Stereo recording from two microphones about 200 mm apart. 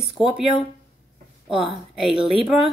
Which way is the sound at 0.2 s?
Centre (ahead or behind).